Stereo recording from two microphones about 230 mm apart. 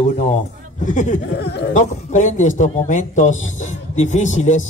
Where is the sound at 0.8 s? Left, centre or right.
Left.